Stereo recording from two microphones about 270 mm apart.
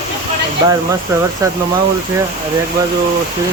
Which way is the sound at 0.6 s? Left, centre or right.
Centre.